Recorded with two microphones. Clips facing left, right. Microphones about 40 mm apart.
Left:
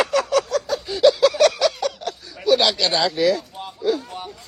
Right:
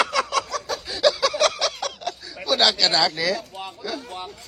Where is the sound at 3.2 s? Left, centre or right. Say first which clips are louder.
Left 6 dB; right.